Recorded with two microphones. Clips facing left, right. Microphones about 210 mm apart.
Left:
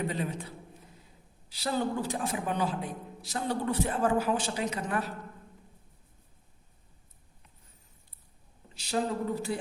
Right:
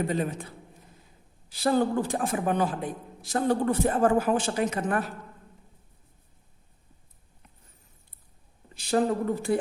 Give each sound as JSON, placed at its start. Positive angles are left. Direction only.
{"t": 0.1, "sound": "a man's voice", "side_deg": -50}
{"t": 8.7, "sound": "a man's voice", "side_deg": -50}